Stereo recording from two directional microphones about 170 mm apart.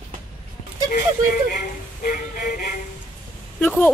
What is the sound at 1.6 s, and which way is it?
Music, 60° left (ahead or behind).